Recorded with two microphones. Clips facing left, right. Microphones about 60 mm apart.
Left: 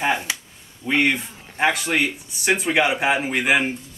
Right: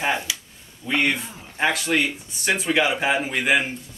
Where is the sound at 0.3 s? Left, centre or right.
Left.